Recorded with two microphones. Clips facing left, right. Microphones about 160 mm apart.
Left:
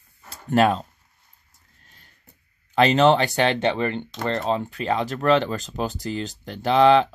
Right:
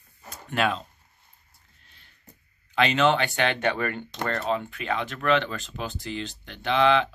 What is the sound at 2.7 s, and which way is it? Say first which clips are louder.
Speech: left 5 dB; 40° left (ahead or behind).